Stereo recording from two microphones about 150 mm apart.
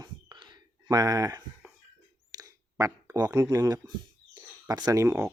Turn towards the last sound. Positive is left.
turn(degrees=-20)  # may be behind; listen again after turning